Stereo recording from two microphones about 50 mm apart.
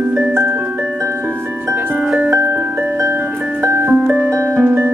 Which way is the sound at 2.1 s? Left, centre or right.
Right.